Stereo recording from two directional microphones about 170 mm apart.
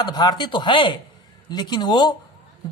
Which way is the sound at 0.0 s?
25° left (ahead or behind).